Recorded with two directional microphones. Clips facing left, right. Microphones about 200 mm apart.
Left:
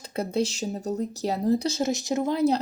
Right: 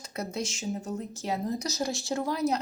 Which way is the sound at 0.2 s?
30° left (ahead or behind).